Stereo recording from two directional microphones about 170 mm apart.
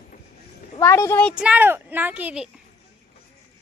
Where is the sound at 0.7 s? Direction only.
15° left (ahead or behind).